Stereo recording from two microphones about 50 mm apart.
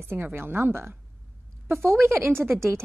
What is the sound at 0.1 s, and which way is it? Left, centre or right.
A woman's voice, right.